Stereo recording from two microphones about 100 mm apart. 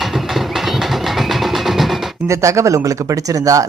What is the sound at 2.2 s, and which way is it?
Speech, 30° right (ahead or behind).